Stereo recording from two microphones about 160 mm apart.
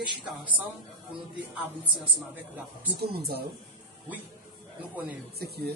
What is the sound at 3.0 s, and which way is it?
Speech, 75° right (ahead or behind).